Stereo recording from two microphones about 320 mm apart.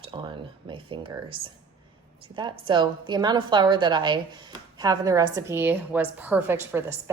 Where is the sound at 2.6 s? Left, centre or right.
Centre.